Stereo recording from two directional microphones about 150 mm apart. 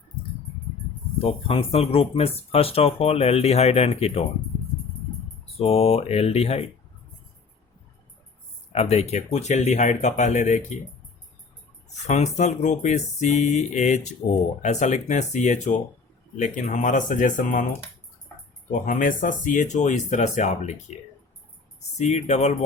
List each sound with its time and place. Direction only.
1.2 s speech: 40° left (ahead or behind)
5.5 s speech: 40° left (ahead or behind)
8.7 s speech: 45° left (ahead or behind)
11.9 s speech: 50° left (ahead or behind)
18.7 s speech: 60° left (ahead or behind)
21.9 s speech: 50° left (ahead or behind)